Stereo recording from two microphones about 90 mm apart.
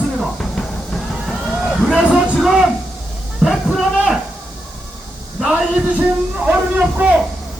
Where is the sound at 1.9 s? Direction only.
10° right (ahead or behind).